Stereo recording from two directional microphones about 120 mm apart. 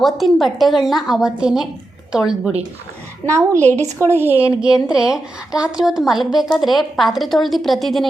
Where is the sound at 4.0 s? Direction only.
20° right (ahead or behind).